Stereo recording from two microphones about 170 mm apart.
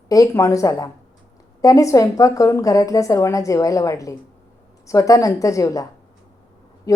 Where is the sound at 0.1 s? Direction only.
20° left (ahead or behind).